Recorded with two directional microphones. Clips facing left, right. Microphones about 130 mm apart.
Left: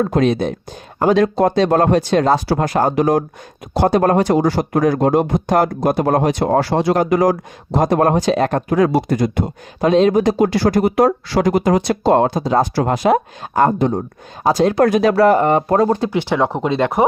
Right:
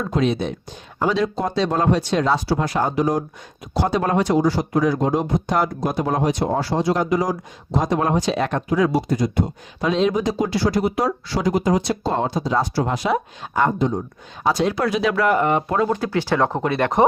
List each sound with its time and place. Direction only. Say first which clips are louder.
0.0 s speech: left 5 dB; 50° left (ahead or behind)
3.8 s speech: left 6 dB; 50° left (ahead or behind)
9.8 s speech: left 6 dB; 45° left (ahead or behind)
15.1 s speech: left 6 dB; 35° left (ahead or behind)
16.0 s speech: left 3 dB; 20° left (ahead or behind)